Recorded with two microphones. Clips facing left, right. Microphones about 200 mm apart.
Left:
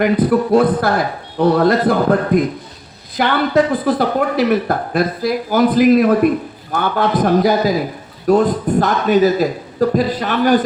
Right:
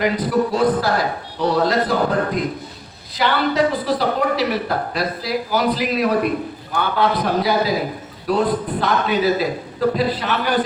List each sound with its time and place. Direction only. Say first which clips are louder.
0.0 s a man's voice: left 4 dB; 55° left (ahead or behind)